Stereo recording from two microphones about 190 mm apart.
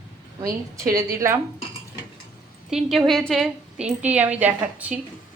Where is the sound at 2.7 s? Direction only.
Centre (ahead or behind).